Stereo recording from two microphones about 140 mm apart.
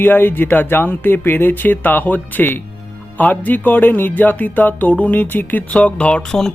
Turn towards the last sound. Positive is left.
turn(degrees=5)  # may be behind; listen again after turning